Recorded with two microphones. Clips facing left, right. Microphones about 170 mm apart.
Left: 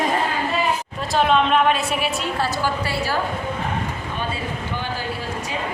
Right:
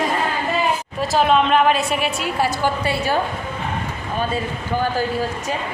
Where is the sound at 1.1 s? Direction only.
Centre (ahead or behind).